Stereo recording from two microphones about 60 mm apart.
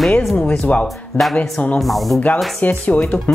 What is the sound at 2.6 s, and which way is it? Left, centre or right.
Speech, left.